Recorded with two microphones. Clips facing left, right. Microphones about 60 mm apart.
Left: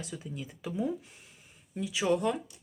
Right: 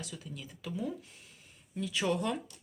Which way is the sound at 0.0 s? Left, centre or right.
Left.